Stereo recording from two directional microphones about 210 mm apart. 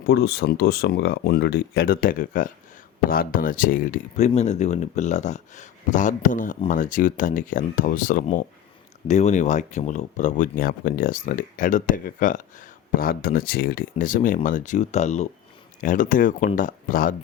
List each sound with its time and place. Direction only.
0.1 s speech: 50° left (ahead or behind)